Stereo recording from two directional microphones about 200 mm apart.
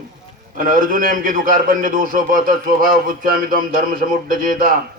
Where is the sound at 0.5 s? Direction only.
45° right (ahead or behind).